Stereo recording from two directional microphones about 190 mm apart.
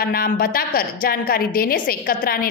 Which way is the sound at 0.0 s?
50° left (ahead or behind).